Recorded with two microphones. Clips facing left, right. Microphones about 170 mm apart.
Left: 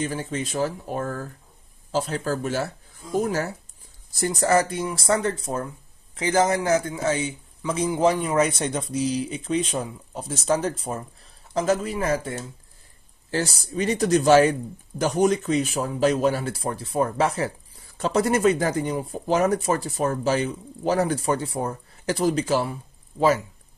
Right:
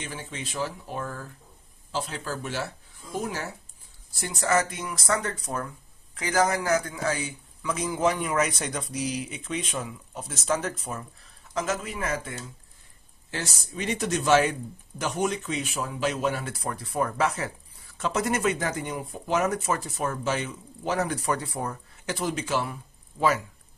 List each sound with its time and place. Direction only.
0.0 s speech: 40° left (ahead or behind)